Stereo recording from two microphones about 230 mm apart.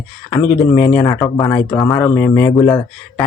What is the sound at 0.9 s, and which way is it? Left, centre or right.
Speech, centre.